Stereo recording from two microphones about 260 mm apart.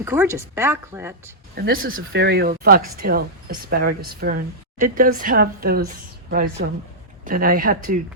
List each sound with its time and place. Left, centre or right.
0.0 s speech: centre
1.5 s speech: right